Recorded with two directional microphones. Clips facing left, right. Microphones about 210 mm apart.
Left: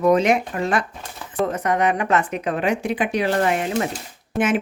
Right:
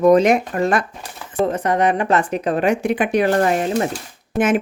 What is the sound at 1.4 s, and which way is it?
Speech, 30° right (ahead or behind).